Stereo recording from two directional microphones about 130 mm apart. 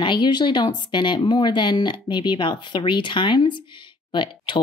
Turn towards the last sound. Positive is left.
turn(degrees=40)  # may be behind; listen again after turning